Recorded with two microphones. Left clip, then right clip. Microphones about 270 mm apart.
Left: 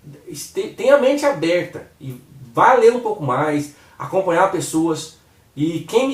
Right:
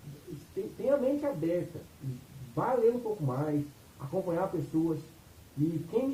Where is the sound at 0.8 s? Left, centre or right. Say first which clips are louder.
Left 15 dB; centre.